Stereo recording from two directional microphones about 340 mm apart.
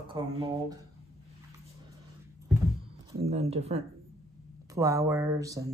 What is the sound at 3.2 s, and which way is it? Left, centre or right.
Speech, centre.